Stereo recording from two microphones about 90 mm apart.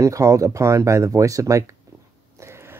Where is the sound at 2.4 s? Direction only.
30° right (ahead or behind).